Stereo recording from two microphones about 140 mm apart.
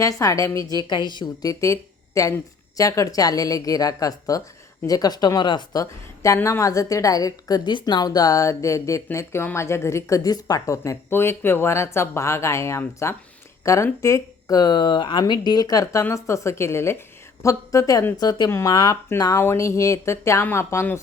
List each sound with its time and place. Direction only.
0.0 s a woman's voice: 25° left (ahead or behind)